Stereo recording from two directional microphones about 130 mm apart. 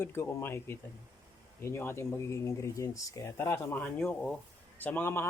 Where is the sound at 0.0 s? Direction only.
20° left (ahead or behind).